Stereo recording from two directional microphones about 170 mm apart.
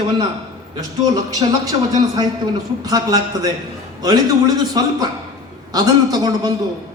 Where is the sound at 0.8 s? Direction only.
20° right (ahead or behind).